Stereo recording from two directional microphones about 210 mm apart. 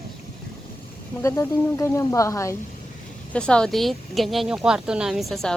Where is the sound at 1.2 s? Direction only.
15° left (ahead or behind).